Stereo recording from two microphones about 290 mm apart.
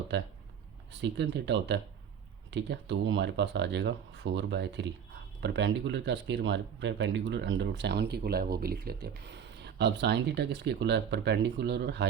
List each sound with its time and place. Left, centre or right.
0.1 s speech: right